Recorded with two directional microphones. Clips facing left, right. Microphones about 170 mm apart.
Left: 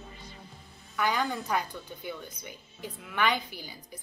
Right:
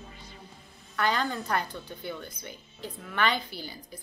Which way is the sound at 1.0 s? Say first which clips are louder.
Right 1 dB; 15° left (ahead or behind).